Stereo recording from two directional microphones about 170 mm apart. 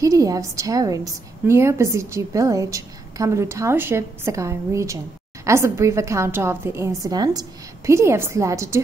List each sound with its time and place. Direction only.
0.0 s a woman's voice: 20° right (ahead or behind)